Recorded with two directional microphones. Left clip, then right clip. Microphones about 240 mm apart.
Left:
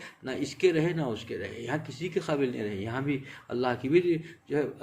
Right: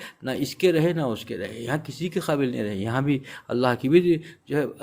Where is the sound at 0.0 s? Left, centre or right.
Right.